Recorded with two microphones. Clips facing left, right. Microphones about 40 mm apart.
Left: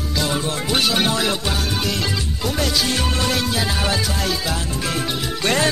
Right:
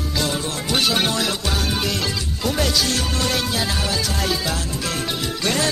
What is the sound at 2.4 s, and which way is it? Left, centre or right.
Music, centre.